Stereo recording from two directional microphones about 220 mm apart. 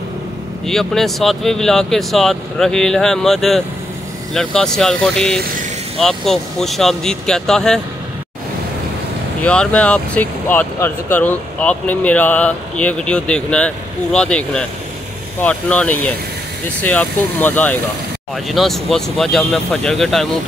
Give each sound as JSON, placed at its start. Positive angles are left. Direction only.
{"t": 0.7, "sound": "speech", "side_deg": 0}
{"t": 9.4, "sound": "speech", "side_deg": 5}